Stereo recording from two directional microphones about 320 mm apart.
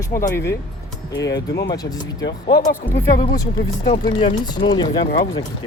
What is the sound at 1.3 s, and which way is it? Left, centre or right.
Speech, left.